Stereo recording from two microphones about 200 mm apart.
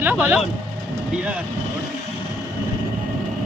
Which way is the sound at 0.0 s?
10° right (ahead or behind).